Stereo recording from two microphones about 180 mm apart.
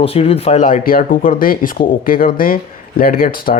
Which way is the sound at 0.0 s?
35° left (ahead or behind).